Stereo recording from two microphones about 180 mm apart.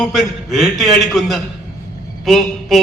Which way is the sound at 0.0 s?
Centre (ahead or behind).